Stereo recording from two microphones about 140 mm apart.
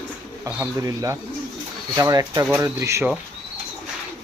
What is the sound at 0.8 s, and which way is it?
Speech, 20° right (ahead or behind).